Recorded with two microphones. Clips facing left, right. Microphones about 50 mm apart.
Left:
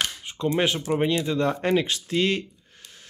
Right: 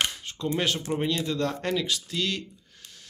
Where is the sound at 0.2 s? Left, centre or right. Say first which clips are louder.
Left 4 dB; centre.